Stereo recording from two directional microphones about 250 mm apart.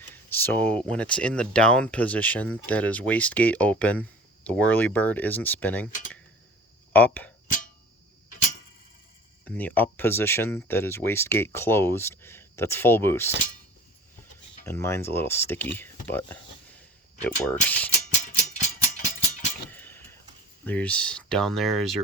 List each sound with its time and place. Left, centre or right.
0.1 s speech: centre
6.9 s speech: centre
9.4 s speech: centre
14.6 s speech: centre
17.4 s speech: centre
18.3 s music: left
19.7 s keys jangling: centre
20.7 s speech: centre